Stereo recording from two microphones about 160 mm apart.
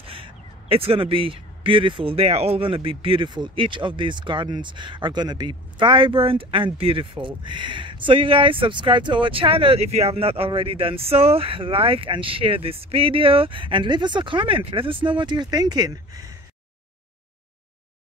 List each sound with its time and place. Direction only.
0.0 s speech: 35° right (ahead or behind)